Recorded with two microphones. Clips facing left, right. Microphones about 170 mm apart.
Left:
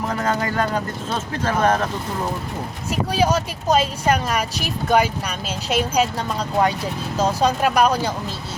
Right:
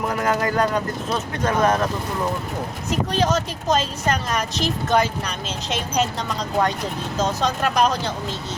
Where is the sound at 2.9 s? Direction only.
10° left (ahead or behind).